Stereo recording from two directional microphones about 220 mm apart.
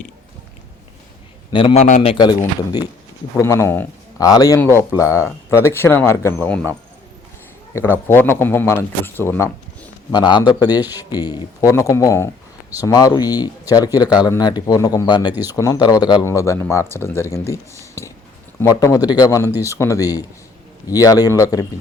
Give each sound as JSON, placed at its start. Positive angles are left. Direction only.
{"t": 1.5, "sound": "a man's voice", "side_deg": 20}
{"t": 3.3, "sound": "speech", "side_deg": 15}
{"t": 10.1, "sound": "a man's voice", "side_deg": 20}